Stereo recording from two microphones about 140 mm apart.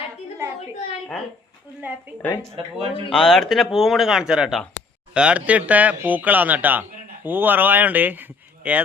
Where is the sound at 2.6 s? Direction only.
45° right (ahead or behind).